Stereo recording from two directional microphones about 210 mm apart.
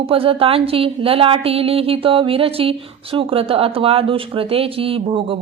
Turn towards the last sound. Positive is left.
turn(degrees=-25)  # may be behind; listen again after turning